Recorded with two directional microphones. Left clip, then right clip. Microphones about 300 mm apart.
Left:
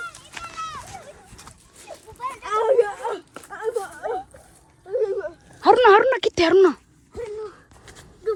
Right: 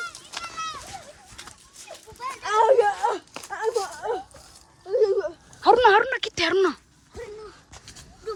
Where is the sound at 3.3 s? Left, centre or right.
Right.